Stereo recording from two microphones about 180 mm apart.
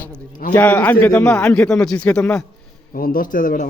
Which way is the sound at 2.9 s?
50° left (ahead or behind).